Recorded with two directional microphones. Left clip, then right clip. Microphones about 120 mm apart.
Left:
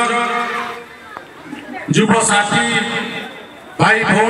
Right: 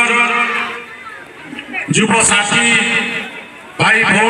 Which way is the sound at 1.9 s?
25° right (ahead or behind).